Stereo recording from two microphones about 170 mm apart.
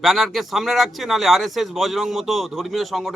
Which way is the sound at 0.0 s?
Centre (ahead or behind).